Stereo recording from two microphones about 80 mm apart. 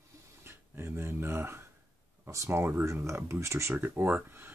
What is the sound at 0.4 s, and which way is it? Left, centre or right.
Dog, right.